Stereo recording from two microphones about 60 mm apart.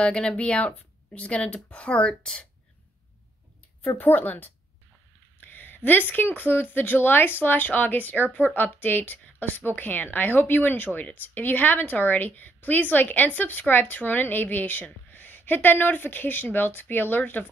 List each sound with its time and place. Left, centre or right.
0.0 s speech: centre
4.0 s speech: left